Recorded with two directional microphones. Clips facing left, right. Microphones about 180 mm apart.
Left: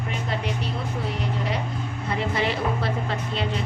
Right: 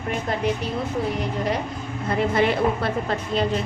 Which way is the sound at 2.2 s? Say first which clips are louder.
Right 6 dB; 50° right (ahead or behind).